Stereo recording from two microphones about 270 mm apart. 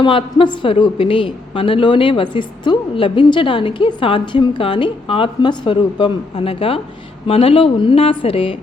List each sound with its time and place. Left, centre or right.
0.0 s a woman's voice: centre